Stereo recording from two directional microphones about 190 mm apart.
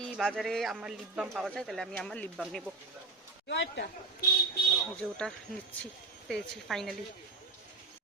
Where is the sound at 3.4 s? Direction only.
70° left (ahead or behind).